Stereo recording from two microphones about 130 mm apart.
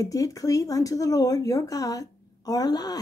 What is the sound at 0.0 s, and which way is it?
Speech, 25° left (ahead or behind).